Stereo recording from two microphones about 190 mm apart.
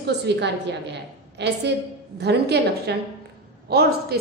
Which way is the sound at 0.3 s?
65° right (ahead or behind).